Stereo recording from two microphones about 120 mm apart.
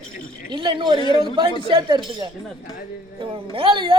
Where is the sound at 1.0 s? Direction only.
40° left (ahead or behind).